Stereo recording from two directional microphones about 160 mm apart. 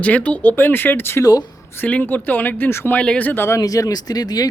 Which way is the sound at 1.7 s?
10° left (ahead or behind).